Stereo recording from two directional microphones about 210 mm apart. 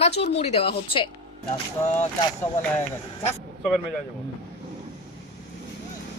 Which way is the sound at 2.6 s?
10° left (ahead or behind).